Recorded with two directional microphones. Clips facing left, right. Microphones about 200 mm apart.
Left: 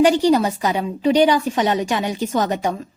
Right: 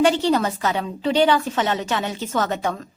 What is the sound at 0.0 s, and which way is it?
A woman's voice, 15° left (ahead or behind).